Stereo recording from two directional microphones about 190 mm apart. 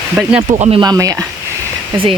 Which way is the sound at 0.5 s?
30° right (ahead or behind).